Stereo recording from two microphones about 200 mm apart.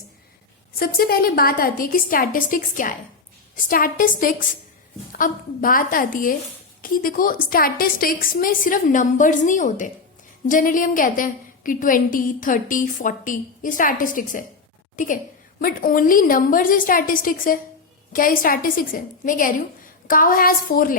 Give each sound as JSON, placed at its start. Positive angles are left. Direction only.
{"t": 0.8, "sound": "a woman's voice", "side_deg": 50}